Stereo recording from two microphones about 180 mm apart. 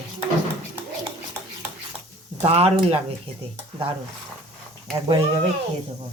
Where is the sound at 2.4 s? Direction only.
35° right (ahead or behind).